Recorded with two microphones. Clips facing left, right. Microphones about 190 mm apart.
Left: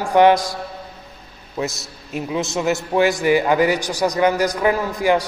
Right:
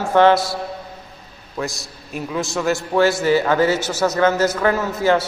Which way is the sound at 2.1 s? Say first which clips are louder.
Left 1 dB; 20° left (ahead or behind).